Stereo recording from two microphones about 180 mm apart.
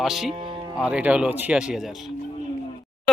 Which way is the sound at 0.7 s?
5° right (ahead or behind).